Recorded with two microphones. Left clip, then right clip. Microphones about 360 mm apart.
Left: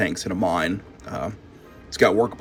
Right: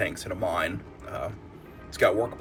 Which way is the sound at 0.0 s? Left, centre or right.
Centre.